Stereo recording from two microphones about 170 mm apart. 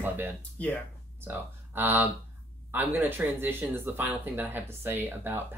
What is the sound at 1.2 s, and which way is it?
Speech, 10° right (ahead or behind).